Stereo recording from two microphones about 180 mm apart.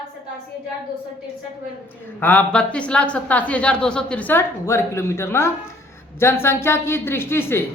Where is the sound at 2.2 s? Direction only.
10° left (ahead or behind).